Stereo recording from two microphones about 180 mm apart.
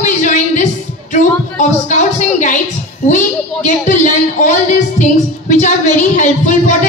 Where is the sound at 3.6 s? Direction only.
45° left (ahead or behind).